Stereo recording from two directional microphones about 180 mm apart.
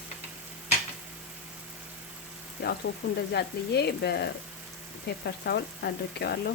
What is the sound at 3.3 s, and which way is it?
Speech, 65° left (ahead or behind).